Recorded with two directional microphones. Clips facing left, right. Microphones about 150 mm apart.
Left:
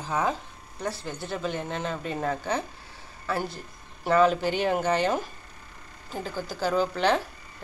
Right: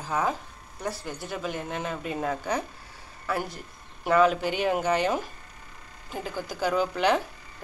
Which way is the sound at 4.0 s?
5° right (ahead or behind).